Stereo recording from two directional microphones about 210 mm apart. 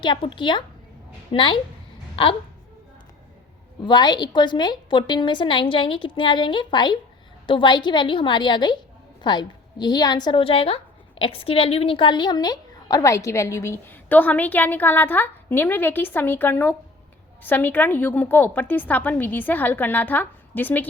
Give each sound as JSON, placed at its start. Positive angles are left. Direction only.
{"t": 0.0, "sound": "a woman's voice", "side_deg": 25}
{"t": 3.8, "sound": "a woman's voice", "side_deg": 20}